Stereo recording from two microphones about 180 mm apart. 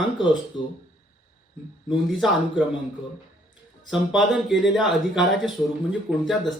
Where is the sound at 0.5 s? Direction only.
25° left (ahead or behind).